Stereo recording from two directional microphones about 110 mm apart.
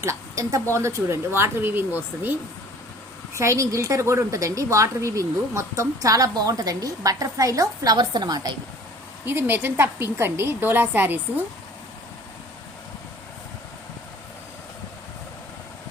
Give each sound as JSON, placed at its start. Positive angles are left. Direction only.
{"t": 0.0, "sound": "a woman's voice", "side_deg": -25}
{"t": 3.3, "sound": "a woman's voice", "side_deg": -25}
{"t": 9.2, "sound": "a woman's voice", "side_deg": -20}